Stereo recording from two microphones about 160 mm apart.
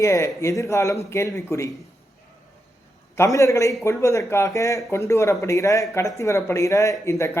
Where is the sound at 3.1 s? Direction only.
20° left (ahead or behind).